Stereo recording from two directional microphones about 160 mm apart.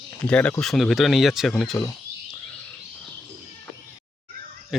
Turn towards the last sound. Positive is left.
turn(degrees=0)  # may be behind; listen again after turning